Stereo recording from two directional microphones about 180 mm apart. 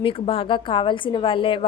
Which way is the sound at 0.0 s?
30° left (ahead or behind).